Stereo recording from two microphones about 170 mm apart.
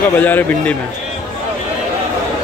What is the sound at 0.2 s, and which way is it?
Speech, 10° left (ahead or behind).